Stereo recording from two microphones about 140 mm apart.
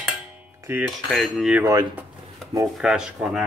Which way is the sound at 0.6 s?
15° right (ahead or behind).